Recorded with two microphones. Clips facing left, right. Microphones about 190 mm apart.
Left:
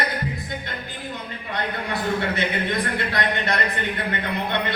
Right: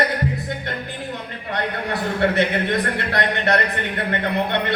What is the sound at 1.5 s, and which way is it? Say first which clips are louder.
Speech: right 3 dB; 65° right (ahead or behind).